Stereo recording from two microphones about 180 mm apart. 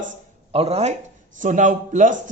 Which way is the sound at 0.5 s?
35° right (ahead or behind).